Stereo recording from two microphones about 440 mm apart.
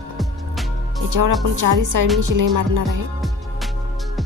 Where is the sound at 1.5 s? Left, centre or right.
Right.